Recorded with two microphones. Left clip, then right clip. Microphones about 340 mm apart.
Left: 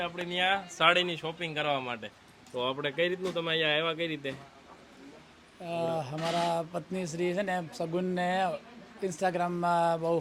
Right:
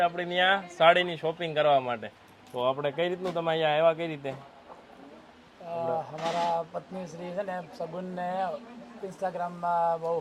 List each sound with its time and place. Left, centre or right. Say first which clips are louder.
0.0 s speech: right 5 dB; centre
0.8 s speech: right 4 dB; centre
5.7 s sheep: right 1 dB; left
6.5 s speech: right 2 dB; left